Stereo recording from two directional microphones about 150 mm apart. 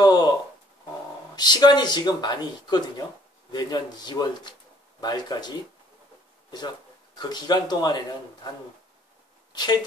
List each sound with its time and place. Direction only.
0.0 s a sound: 25° left (ahead or behind)
1.3 s speech: 30° left (ahead or behind)
7.2 s speech: 30° left (ahead or behind)
9.5 s a woman's voice: 30° left (ahead or behind)